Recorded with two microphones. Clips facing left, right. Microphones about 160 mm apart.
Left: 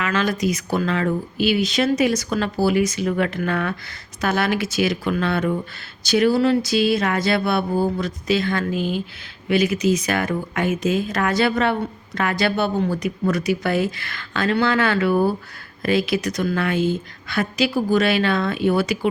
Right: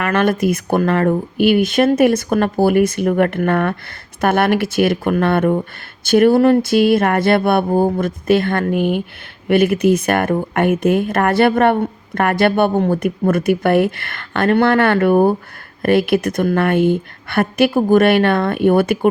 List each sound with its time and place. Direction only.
0.0 s speech: 60° right (ahead or behind)